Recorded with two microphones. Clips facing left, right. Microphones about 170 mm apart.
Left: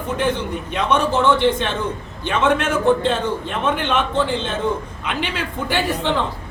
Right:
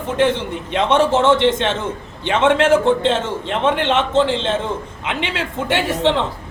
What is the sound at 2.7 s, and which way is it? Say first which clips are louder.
Speech: right 3 dB; 25° right (ahead or behind).